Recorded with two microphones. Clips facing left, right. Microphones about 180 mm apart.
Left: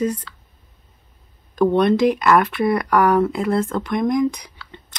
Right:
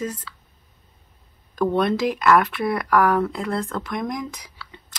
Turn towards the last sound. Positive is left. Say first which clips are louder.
# left 2 dB
turn(degrees=-5)  # may be behind; listen again after turning